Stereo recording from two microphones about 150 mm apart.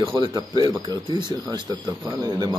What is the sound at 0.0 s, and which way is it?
Speech, 35° right (ahead or behind).